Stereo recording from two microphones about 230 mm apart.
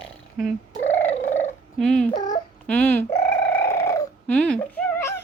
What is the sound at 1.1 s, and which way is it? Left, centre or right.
Purr, left.